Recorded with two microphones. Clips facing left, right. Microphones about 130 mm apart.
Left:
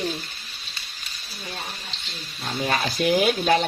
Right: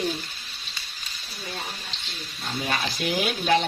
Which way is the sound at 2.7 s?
45° left (ahead or behind).